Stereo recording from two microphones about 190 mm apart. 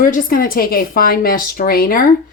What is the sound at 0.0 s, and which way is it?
Speech, 45° left (ahead or behind).